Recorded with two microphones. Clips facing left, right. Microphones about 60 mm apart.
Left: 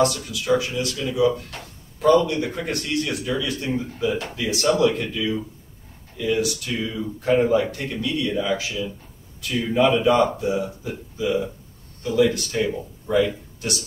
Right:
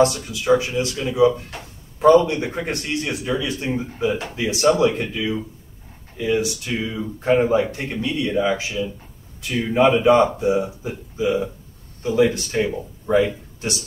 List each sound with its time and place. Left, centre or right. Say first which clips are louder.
0.0 s speech: right 3 dB; right